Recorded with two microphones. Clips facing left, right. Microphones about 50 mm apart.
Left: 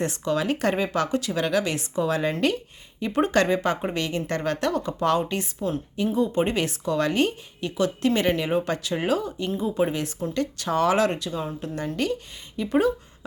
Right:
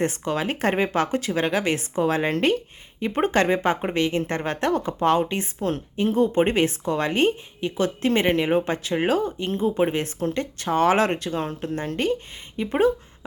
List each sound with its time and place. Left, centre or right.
0.0 s speech: right
5.5 s speech: right